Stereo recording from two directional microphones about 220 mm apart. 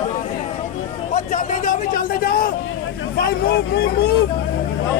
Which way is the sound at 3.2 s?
45° left (ahead or behind).